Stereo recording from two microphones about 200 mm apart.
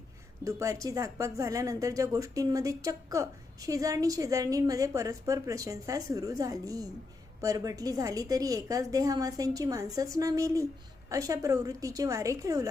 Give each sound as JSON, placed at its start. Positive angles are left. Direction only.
{"t": 0.4, "sound": "a woman's voice", "side_deg": -15}